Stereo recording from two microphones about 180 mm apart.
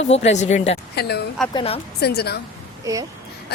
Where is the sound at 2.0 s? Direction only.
60° left (ahead or behind).